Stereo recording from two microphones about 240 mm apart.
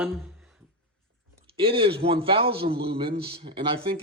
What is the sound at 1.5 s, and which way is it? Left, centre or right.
A man's voice, right.